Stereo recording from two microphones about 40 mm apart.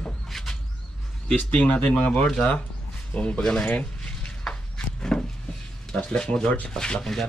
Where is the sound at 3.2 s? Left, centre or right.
Left.